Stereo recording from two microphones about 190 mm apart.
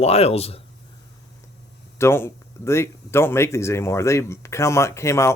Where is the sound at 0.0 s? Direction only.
35° left (ahead or behind).